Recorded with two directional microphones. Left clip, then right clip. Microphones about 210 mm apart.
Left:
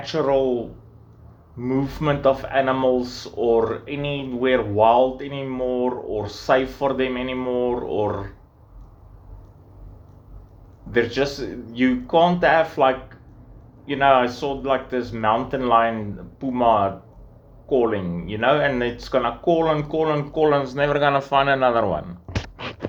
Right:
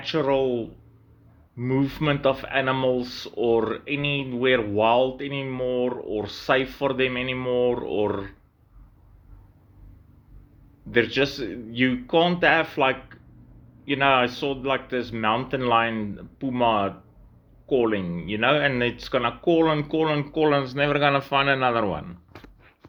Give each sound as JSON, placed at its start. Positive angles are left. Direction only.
{"t": 0.0, "sound": "speech", "side_deg": -45}
{"t": 10.9, "sound": "speech", "side_deg": -45}